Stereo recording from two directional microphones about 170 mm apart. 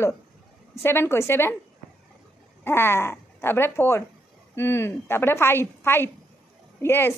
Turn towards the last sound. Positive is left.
turn(degrees=15)  # may be behind; listen again after turning